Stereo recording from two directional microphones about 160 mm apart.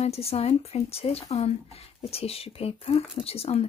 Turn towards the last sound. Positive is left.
turn(degrees=40)  # may be behind; listen again after turning